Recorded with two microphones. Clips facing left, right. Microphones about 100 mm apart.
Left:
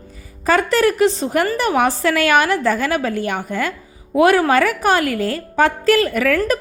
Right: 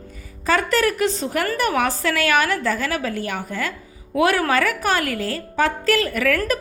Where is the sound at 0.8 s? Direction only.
35° left (ahead or behind).